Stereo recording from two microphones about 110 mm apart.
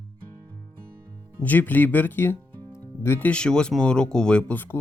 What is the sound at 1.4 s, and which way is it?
Speech, 15° left (ahead or behind).